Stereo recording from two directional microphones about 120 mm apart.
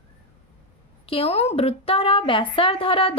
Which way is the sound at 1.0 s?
50° left (ahead or behind).